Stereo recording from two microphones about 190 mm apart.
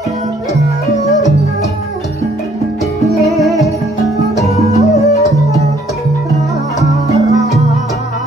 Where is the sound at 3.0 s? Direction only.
Centre (ahead or behind).